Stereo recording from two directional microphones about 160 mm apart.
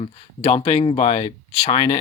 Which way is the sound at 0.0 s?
35° left (ahead or behind).